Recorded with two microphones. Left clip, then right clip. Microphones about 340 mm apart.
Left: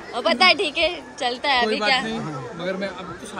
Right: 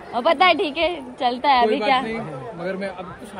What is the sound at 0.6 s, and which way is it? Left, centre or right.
A woman's voice, centre.